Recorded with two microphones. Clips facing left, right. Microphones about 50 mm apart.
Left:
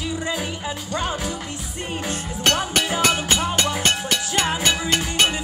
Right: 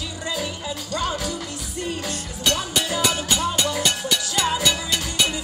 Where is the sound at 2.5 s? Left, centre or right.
Left.